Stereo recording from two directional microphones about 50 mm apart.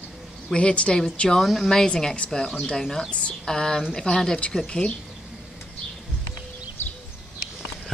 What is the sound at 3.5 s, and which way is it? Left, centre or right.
A woman's voice, centre.